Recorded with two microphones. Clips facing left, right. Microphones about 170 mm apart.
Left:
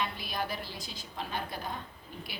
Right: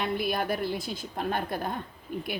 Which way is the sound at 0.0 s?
55° right (ahead or behind).